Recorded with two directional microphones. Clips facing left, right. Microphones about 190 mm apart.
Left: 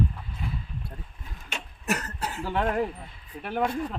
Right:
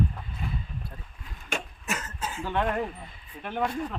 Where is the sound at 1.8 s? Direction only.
65° left (ahead or behind).